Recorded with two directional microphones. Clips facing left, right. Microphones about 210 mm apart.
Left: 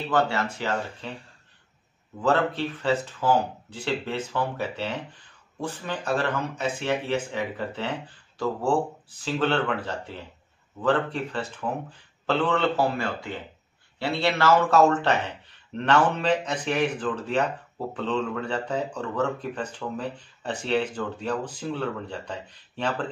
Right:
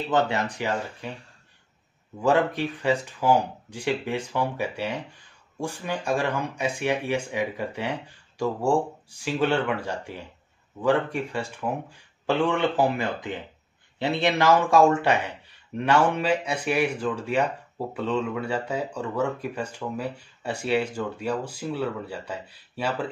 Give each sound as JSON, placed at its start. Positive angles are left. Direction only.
{"t": 0.1, "sound": "a man's voice", "side_deg": -20}
{"t": 2.1, "sound": "a man's voice", "side_deg": -15}